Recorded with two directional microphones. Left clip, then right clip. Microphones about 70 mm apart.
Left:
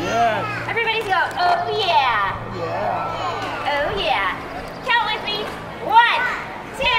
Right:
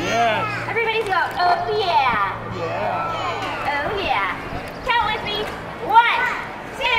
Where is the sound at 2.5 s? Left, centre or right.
Centre.